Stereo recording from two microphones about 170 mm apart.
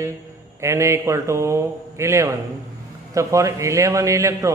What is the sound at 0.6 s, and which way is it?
A man's voice, 15° right (ahead or behind).